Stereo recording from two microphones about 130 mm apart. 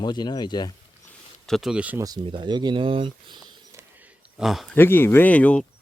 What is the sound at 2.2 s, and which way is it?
Speech, 40° right (ahead or behind).